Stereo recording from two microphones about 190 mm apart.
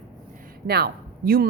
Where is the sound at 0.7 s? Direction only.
55° right (ahead or behind).